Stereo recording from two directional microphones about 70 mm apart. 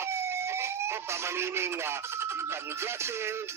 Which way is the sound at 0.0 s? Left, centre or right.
Right.